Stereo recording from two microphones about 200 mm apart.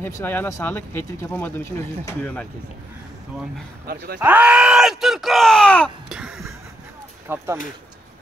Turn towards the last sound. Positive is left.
turn(degrees=-10)  # may be behind; listen again after turning